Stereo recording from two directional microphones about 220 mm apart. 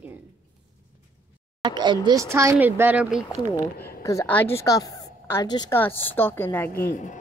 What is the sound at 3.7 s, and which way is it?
Speech, 45° left (ahead or behind).